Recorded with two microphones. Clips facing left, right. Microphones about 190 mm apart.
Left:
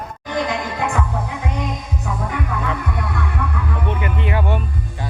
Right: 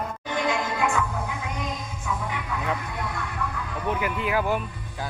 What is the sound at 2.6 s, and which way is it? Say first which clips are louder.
Music: left 5 dB; 60° left (ahead or behind).